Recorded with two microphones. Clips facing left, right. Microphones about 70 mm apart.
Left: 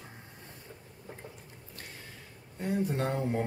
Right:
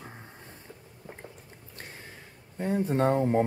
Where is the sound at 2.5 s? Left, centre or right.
Right.